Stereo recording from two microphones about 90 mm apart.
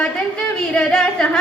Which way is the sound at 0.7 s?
10° left (ahead or behind).